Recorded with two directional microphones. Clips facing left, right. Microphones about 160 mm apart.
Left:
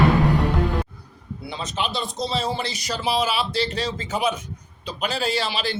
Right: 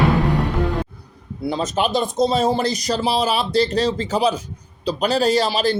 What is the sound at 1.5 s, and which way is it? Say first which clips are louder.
A man's voice: right 8 dB; 45° right (ahead or behind).